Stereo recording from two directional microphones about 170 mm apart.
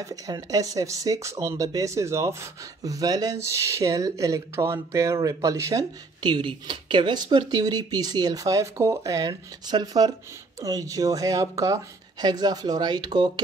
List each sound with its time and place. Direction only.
0.0 s speech: 20° right (ahead or behind)